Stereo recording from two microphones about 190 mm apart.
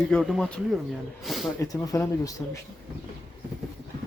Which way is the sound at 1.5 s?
20° left (ahead or behind).